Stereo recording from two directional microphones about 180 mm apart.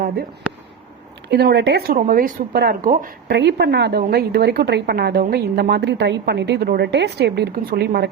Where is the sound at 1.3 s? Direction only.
65° right (ahead or behind).